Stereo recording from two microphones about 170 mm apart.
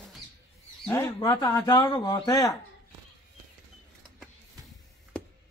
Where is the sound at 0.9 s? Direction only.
15° left (ahead or behind).